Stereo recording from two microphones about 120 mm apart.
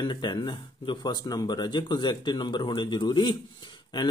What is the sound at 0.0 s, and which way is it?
Speech, 40° left (ahead or behind).